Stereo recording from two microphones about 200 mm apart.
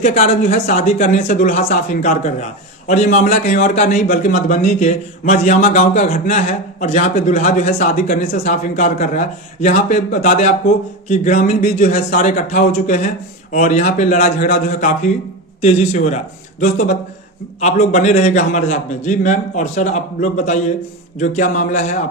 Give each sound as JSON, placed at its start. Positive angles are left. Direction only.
{"t": 0.1, "sound": "speech", "side_deg": 35}